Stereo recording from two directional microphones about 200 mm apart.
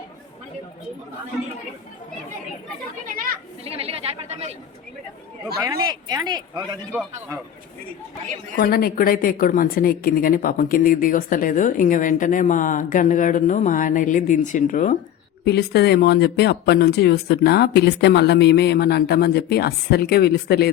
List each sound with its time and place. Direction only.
3.6 s speech: 30° right (ahead or behind)
5.6 s speech: 20° right (ahead or behind)
8.5 s a woman's voice: 50° left (ahead or behind)
15.4 s speech: 55° left (ahead or behind)